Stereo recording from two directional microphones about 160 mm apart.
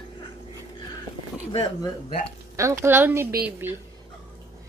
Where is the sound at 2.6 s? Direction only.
15° right (ahead or behind).